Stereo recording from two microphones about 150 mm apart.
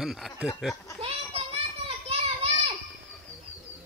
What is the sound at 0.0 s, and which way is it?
Speech, centre (ahead or behind).